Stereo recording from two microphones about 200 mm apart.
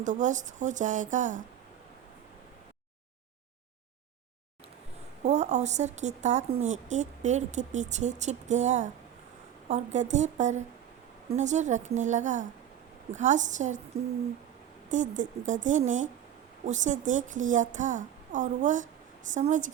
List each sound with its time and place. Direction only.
0.0 s speech: 40° right (ahead or behind)
5.2 s speech: 35° right (ahead or behind)
14.8 s speech: 40° right (ahead or behind)